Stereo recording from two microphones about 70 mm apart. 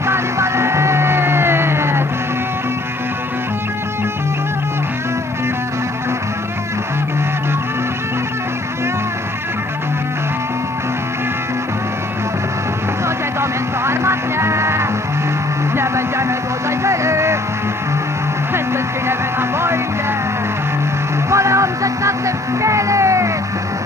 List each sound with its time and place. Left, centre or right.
0.0 s music: right
13.4 s music: right
21.3 s music: right